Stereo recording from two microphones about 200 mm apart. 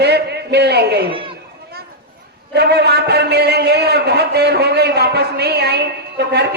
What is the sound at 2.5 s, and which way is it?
A man's voice, 55° right (ahead or behind).